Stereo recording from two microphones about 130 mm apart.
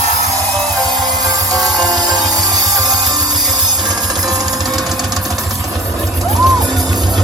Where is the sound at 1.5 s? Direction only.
30° right (ahead or behind).